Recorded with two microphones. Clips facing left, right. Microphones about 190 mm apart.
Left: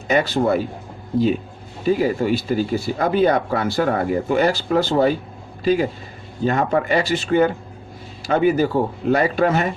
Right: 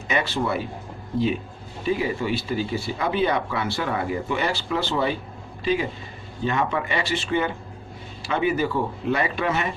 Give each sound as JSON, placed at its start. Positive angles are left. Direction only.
{"t": 0.1, "sound": "speech", "side_deg": 40}
{"t": 1.8, "sound": "speech", "side_deg": 45}